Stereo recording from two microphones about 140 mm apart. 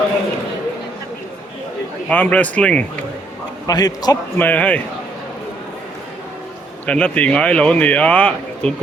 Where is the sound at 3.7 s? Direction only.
30° left (ahead or behind).